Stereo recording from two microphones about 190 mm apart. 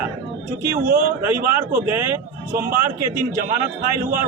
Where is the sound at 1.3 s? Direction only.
10° right (ahead or behind).